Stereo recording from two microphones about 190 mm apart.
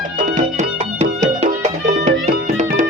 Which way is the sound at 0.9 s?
35° right (ahead or behind).